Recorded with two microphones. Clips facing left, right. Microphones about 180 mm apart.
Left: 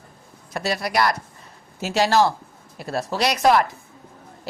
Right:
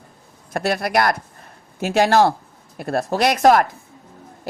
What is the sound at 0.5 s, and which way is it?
A woman's voice, 55° right (ahead or behind).